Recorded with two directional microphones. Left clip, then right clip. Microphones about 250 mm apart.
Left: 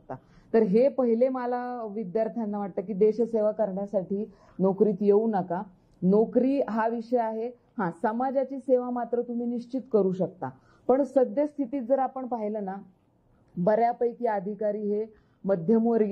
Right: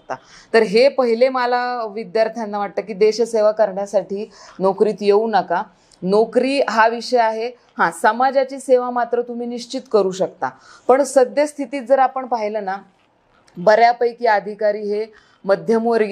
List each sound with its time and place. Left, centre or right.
0.5 s a woman's voice: centre
9.8 s a woman's voice: centre
15.6 s speech: centre